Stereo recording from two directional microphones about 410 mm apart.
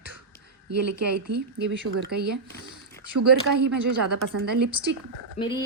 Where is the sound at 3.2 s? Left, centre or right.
Right.